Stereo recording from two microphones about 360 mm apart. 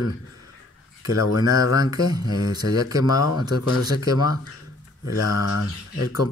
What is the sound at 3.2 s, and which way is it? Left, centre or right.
Speech, left.